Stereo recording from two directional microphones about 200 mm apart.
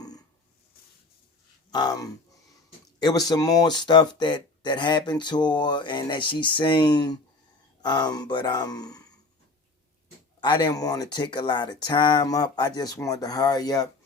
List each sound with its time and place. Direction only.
0.0 s a sound: 20° left (ahead or behind)
1.7 s speech: 20° left (ahead or behind)
10.4 s speech: 20° left (ahead or behind)